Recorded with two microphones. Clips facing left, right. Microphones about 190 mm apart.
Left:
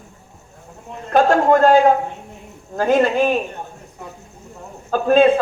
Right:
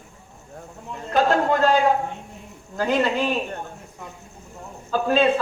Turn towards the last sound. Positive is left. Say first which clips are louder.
# left 6 dB
turn(degrees=50)  # may be behind; listen again after turning